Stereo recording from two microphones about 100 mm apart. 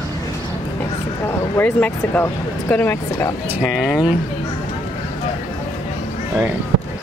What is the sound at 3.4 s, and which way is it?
Speech, 10° right (ahead or behind).